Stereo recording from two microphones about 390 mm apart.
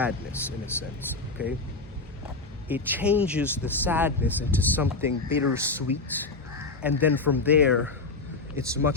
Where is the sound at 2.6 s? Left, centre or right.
Centre.